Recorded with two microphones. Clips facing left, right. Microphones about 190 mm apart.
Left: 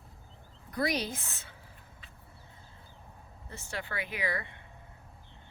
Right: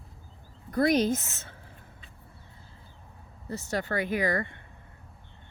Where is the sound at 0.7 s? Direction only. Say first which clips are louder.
Right 8 dB; 50° right (ahead or behind).